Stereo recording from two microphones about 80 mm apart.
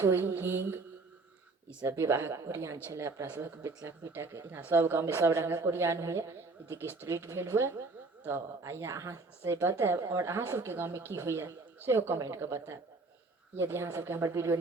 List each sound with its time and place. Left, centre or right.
0.1 s mantra: right
1.9 s mantra: right
2.3 s a woman's voice: right
10.0 s a woman's voice: right
10.3 s a woman's voice: right